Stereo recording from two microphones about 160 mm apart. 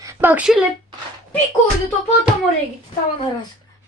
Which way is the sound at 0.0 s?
15° right (ahead or behind).